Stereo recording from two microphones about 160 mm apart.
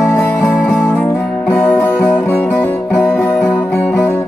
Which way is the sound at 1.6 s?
10° left (ahead or behind).